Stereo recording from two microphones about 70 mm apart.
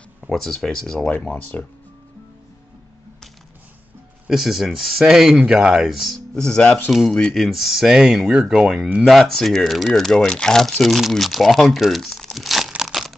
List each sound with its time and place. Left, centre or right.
0.3 s speech: centre
1.1 s speech: left
4.3 s speech: centre
6.3 s speech: centre
7.3 s speech: centre